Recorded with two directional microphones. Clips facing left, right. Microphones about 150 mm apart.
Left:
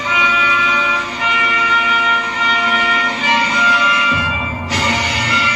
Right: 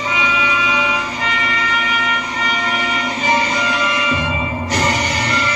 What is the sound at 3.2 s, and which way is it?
Music, 40° right (ahead or behind).